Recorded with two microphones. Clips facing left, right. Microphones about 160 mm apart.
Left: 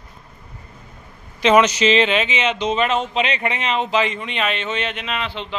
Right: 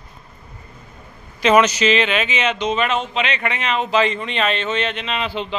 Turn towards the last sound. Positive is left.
turn(degrees=-5)  # may be behind; listen again after turning